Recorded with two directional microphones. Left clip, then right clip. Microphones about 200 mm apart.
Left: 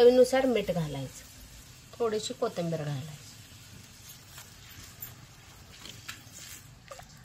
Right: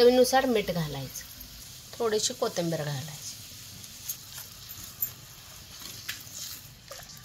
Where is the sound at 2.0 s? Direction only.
35° right (ahead or behind).